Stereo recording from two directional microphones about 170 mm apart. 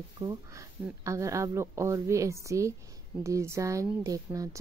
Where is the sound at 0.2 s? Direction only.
20° right (ahead or behind).